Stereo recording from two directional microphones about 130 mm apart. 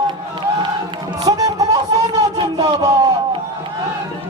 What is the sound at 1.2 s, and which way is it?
Music, 25° right (ahead or behind).